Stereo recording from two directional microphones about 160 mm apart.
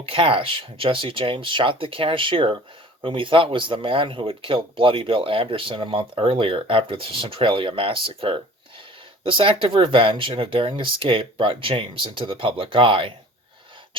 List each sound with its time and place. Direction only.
0.0 s speech: 35° right (ahead or behind)